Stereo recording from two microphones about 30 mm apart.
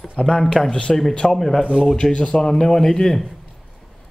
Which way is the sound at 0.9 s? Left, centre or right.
Centre.